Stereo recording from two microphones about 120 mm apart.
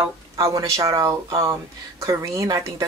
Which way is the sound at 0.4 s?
25° right (ahead or behind).